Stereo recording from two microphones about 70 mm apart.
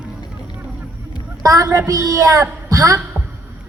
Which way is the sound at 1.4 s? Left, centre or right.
Right.